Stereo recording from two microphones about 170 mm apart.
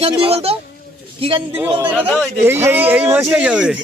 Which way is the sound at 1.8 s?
10° right (ahead or behind).